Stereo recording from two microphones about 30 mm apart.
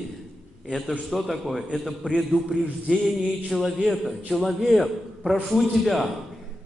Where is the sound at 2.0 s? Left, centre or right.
Left.